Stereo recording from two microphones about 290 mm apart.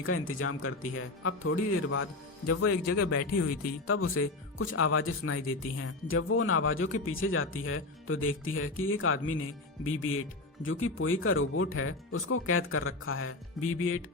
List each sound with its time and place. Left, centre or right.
0.0 s speech: left